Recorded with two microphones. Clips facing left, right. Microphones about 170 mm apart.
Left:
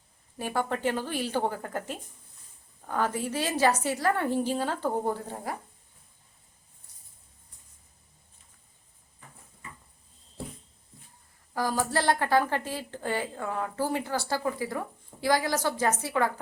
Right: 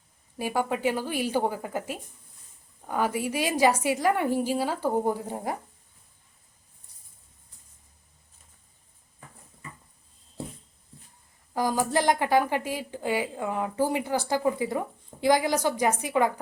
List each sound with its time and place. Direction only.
0.3 s speech: 10° right (ahead or behind)
11.5 s speech: 15° right (ahead or behind)